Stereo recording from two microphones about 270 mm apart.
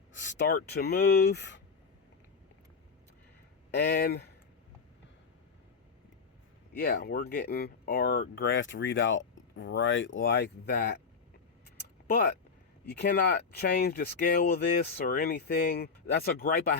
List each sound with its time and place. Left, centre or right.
0.1 s speech: left
3.7 s speech: left
6.7 s speech: left
12.0 s speech: left